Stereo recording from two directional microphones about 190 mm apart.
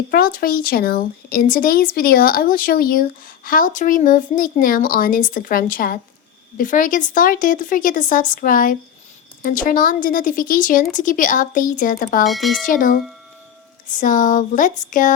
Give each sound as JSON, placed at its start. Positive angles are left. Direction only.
{"t": 0.1, "sound": "speech", "side_deg": 50}
{"t": 12.2, "sound": "speech", "side_deg": 0}
{"t": 12.6, "sound": "speech", "side_deg": 45}